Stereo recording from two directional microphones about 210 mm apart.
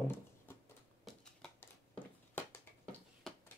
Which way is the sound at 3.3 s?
Centre (ahead or behind).